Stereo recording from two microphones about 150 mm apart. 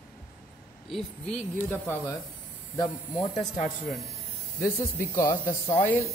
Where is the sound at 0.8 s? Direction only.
5° left (ahead or behind).